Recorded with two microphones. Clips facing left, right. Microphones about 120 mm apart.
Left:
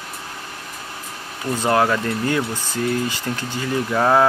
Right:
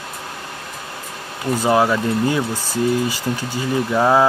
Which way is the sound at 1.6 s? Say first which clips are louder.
Right 2 dB; 10° right (ahead or behind).